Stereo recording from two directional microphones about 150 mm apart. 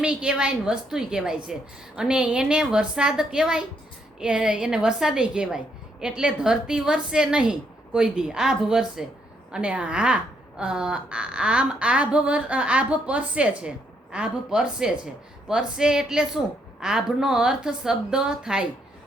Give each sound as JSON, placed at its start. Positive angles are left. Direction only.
{"t": 0.0, "sound": "a woman's voice", "side_deg": -5}